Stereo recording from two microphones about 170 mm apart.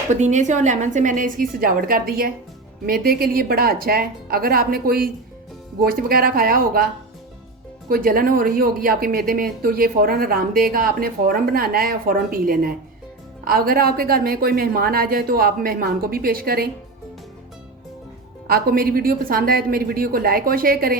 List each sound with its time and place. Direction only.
0.1 s a woman's voice: 45° right (ahead or behind)
7.9 s speech: 60° right (ahead or behind)
18.4 s speech: 60° right (ahead or behind)